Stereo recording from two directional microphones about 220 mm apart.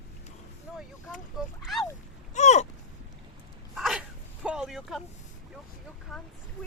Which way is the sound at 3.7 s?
Centre (ahead or behind).